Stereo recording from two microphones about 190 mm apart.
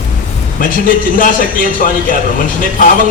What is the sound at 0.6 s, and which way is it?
A man's voice, 45° left (ahead or behind).